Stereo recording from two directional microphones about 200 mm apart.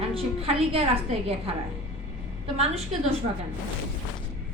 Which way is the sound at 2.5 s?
30° right (ahead or behind).